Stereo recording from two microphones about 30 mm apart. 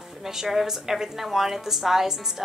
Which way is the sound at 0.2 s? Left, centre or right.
Centre.